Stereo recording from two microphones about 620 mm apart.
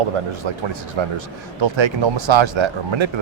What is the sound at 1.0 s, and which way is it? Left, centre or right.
Speech, right.